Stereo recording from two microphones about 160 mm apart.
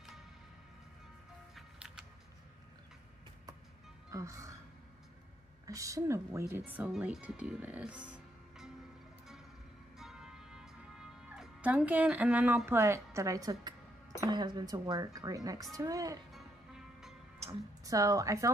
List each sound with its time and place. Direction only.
1.5 s music: 5° right (ahead or behind)
4.1 s speech: 20° right (ahead or behind)
5.7 s speech: 20° right (ahead or behind)
9.9 s music: 5° right (ahead or behind); by 13.7 s 20° right (ahead or behind)
14.2 s speech: 25° right (ahead or behind)
16.3 s music: centre (ahead or behind)
17.5 s a woman's voice: 20° right (ahead or behind)